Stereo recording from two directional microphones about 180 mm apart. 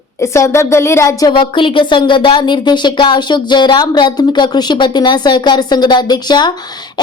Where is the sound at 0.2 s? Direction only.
15° left (ahead or behind).